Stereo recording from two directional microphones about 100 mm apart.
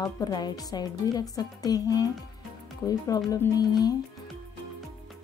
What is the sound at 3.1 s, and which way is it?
Speech, 35° left (ahead or behind).